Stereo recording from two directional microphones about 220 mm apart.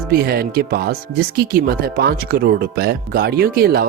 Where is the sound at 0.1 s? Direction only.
45° right (ahead or behind).